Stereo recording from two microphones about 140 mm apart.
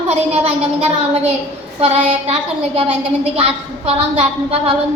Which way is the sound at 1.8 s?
45° right (ahead or behind).